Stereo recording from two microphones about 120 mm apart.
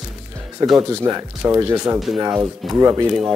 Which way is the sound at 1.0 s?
25° right (ahead or behind).